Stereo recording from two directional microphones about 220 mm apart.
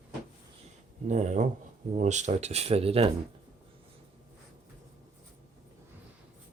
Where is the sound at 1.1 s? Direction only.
35° right (ahead or behind).